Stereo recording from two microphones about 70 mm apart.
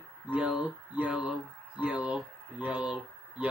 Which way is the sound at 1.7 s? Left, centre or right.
Centre.